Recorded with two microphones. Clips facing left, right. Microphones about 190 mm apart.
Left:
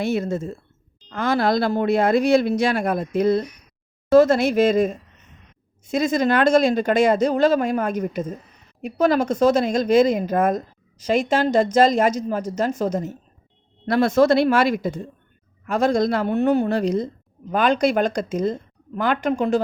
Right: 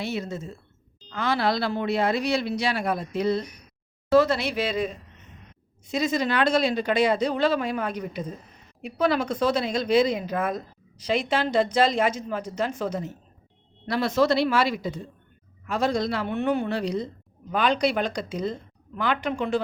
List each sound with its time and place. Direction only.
0.0 s speech: 50° left (ahead or behind)